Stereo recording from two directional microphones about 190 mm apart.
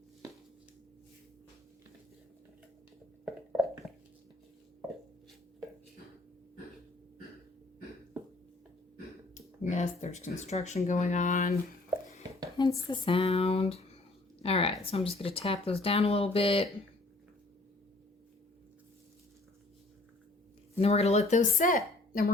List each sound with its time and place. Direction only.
9.3 s a woman's voice: 40° left (ahead or behind)
12.5 s a woman's voice: 25° left (ahead or behind)
20.7 s a woman's voice: 35° left (ahead or behind)